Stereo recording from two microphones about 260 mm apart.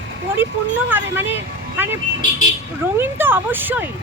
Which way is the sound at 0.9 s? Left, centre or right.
Centre.